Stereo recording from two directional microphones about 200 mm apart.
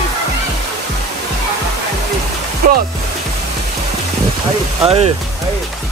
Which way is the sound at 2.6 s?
45° right (ahead or behind).